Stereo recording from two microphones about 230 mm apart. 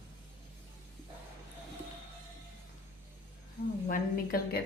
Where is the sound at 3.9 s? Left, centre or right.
Left.